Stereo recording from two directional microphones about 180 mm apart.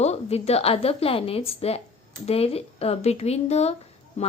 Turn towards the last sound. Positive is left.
turn(degrees=35)  # may be behind; listen again after turning